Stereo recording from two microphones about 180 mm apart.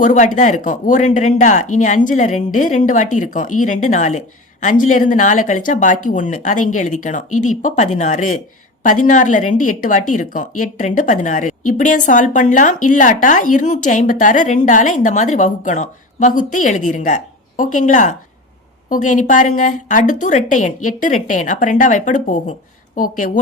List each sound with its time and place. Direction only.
0.0 s speech: 45° left (ahead or behind)